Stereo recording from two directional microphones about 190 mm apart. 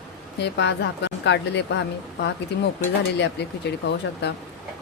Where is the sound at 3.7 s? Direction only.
65° left (ahead or behind).